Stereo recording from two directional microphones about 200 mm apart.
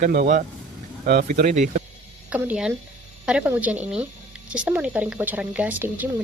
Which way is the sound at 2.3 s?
5° right (ahead or behind).